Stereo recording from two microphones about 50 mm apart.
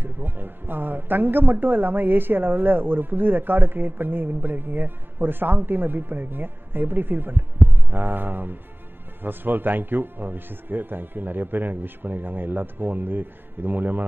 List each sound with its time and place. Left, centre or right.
0.0 s speech: right